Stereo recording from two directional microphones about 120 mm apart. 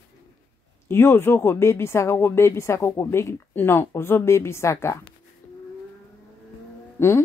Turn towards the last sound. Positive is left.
turn(degrees=20)  # may be behind; listen again after turning